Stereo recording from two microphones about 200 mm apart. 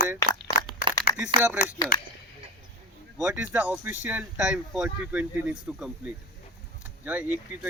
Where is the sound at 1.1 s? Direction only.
5° right (ahead or behind).